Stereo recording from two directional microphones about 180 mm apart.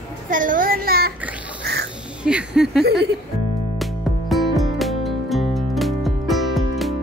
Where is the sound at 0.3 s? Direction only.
50° right (ahead or behind).